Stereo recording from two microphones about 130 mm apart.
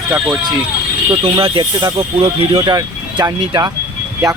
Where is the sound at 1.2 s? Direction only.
45° right (ahead or behind).